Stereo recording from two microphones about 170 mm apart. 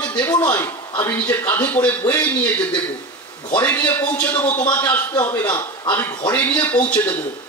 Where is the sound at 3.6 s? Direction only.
15° left (ahead or behind).